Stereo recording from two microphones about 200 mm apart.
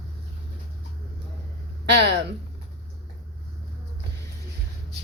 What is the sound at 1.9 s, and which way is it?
Speech, 55° right (ahead or behind).